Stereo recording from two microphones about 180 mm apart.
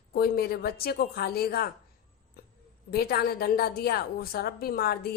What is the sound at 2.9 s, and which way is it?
A woman's voice, 60° left (ahead or behind).